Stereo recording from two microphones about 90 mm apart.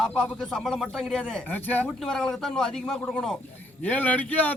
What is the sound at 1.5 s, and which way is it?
Speech, 20° left (ahead or behind).